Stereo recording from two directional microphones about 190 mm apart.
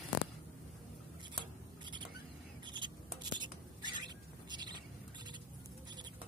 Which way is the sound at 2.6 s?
25° right (ahead or behind).